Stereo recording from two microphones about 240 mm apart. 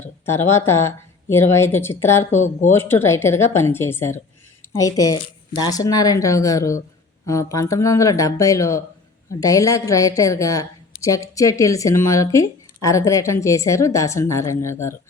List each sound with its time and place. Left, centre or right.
0.0 s speech: centre
2.3 s speech: left
2.7 s speech: centre